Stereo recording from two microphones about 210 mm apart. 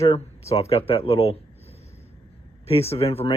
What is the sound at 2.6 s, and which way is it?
Speech, 30° left (ahead or behind).